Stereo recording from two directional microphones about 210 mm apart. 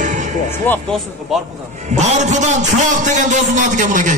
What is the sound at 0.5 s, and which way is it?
Speech, 10° left (ahead or behind).